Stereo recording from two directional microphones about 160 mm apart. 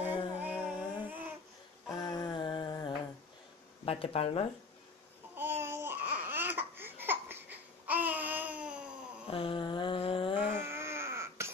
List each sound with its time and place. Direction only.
0.4 s child singing: 10° right (ahead or behind)
1.9 s a sound: 25° left (ahead or behind)
3.8 s speech: 35° left (ahead or behind)
5.3 s babbling: 15° right (ahead or behind)
9.3 s a sound: 35° left (ahead or behind)
10.4 s baby cry: 15° right (ahead or behind)